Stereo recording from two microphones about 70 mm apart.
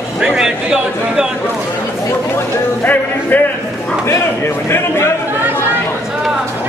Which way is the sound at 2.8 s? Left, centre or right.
Left.